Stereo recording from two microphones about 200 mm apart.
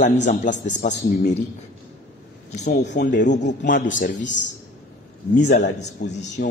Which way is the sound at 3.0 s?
60° left (ahead or behind).